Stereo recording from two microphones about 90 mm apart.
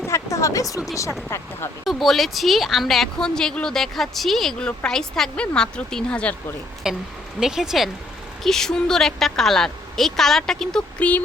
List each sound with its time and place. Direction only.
0.1 s a sound: 35° left (ahead or behind)
1.8 s speech: centre (ahead or behind)
6.8 s a woman's voice: 5° right (ahead or behind)